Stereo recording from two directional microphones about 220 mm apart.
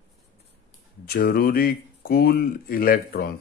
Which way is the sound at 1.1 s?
45° left (ahead or behind).